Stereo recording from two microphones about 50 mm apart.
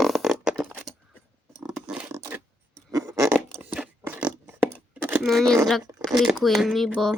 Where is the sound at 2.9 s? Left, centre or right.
Right.